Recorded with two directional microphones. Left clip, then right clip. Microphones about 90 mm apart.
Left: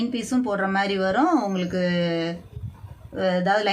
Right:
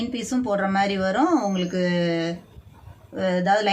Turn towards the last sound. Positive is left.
turn(degrees=35)  # may be behind; listen again after turning